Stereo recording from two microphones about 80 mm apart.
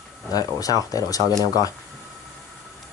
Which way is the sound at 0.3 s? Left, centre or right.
Left.